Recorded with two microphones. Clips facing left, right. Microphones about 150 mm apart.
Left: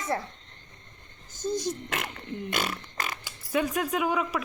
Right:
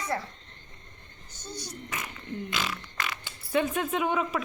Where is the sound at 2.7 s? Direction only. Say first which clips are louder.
Left 1 dB; 45° left (ahead or behind).